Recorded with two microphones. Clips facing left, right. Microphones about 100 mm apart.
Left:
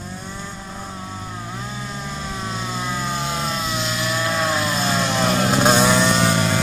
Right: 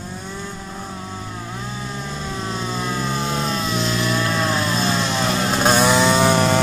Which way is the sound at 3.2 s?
35° right (ahead or behind).